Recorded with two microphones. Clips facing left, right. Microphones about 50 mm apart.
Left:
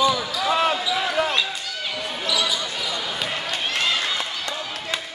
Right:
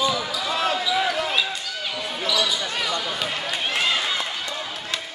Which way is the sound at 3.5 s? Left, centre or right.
Centre.